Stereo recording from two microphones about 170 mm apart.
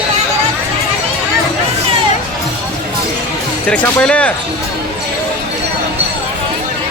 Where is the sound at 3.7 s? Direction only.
5° left (ahead or behind).